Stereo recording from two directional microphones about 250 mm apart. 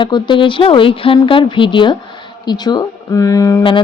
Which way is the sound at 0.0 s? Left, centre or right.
Centre.